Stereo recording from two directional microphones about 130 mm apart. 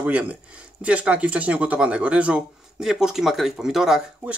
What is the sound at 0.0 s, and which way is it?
Speech, 10° right (ahead or behind).